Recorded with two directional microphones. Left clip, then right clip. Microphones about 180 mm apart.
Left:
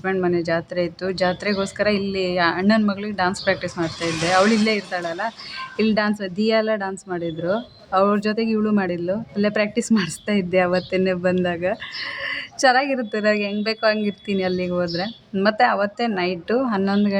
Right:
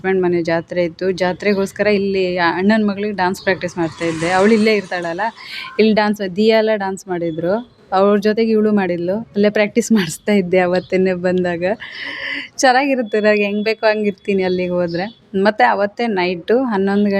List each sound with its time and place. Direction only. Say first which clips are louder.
0.0 s a woman's voice: right 5 dB; 20° right (ahead or behind)